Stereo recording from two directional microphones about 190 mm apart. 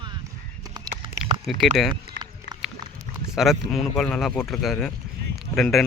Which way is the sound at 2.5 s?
65° right (ahead or behind).